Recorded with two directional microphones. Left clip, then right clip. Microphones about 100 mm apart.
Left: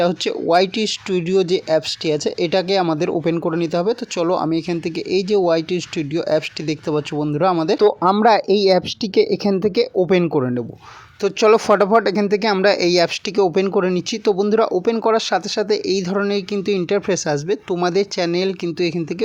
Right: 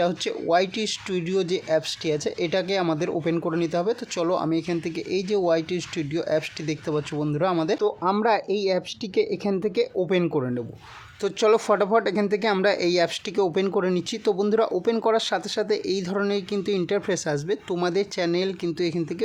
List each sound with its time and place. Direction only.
0.0 s speech: 40° left (ahead or behind)
7.8 s speech: 60° left (ahead or behind); by 19.0 s 25° left (ahead or behind)